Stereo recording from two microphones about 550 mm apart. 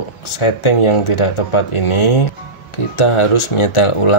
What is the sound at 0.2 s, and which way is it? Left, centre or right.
Speech, left.